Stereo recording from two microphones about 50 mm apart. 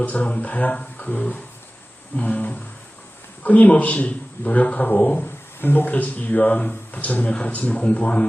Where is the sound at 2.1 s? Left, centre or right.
Left.